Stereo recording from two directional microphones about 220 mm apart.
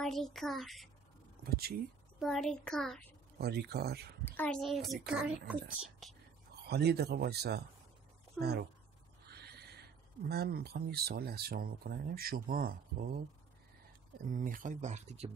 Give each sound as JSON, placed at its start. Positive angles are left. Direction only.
{"t": 0.0, "sound": "a child's voice", "side_deg": 0}
{"t": 1.4, "sound": "speech", "side_deg": -45}
{"t": 2.1, "sound": "a child's voice", "side_deg": 0}
{"t": 3.3, "sound": "speech", "side_deg": -45}
{"t": 4.2, "sound": "a child's voice", "side_deg": 10}
{"t": 6.7, "sound": "speech", "side_deg": -45}
{"t": 14.3, "sound": "speech", "side_deg": -35}